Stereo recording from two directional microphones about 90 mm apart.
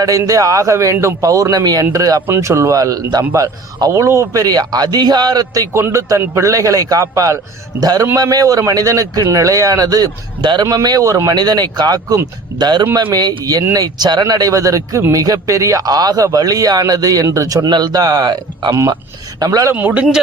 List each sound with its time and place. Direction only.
0.0 s speech: 40° right (ahead or behind)
2.2 s speech: 30° right (ahead or behind)
4.4 s a man's voice: 45° right (ahead or behind)
5.7 s a man's voice: 30° right (ahead or behind); by 10.8 s 55° right (ahead or behind)
10.8 s a man's voice: 40° right (ahead or behind)
19.4 s speech: 40° right (ahead or behind)
19.7 s speech: 20° right (ahead or behind)